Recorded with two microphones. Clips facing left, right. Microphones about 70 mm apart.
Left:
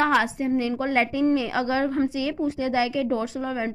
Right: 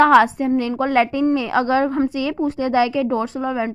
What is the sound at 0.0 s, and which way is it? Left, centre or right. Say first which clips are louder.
A woman's voice: right 9 dB; right.